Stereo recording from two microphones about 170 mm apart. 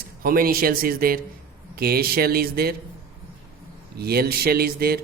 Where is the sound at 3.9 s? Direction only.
65° right (ahead or behind).